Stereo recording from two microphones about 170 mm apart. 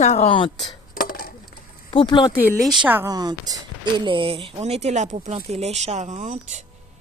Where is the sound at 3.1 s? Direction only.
25° right (ahead or behind); by 6.6 s 45° right (ahead or behind).